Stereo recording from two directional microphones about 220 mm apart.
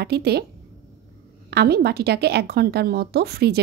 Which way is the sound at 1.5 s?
45° right (ahead or behind).